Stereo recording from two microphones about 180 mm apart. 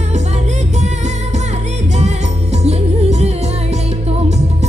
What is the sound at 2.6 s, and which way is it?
Music, 35° right (ahead or behind).